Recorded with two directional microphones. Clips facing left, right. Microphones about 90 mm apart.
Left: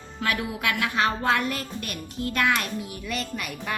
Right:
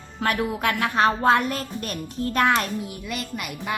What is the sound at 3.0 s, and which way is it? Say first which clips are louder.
Speech: even; 15° right (ahead or behind).